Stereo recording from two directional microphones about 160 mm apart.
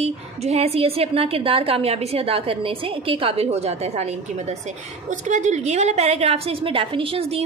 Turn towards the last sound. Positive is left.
turn(degrees=-40)  # may be behind; listen again after turning